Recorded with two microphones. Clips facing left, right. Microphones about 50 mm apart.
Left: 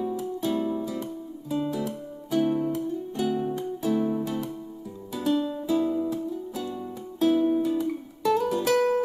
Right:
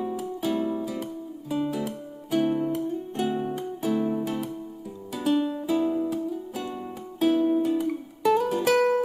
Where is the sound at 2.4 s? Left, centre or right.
Right.